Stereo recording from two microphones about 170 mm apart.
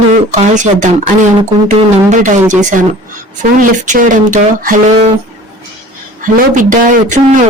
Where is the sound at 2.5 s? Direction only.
45° right (ahead or behind).